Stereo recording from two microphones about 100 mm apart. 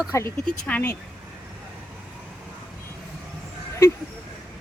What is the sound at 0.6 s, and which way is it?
Speech, 20° left (ahead or behind).